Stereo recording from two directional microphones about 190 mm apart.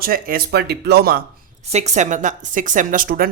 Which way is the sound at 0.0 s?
50° right (ahead or behind).